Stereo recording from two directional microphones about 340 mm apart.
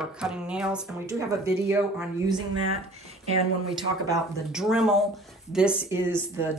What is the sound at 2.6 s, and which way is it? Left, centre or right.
Speech, centre.